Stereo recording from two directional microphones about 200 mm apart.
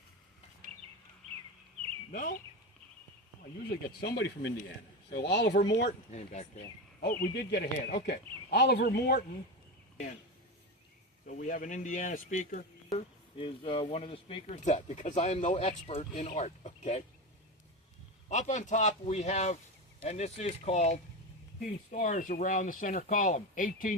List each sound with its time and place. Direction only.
3.7 s speech: 50° left (ahead or behind)
6.1 s speech: 35° left (ahead or behind)
7.0 s speech: 55° left (ahead or behind)
11.3 s speech: 40° left (ahead or behind)
13.3 s speech: 25° left (ahead or behind)
18.3 s speech: 35° left (ahead or behind)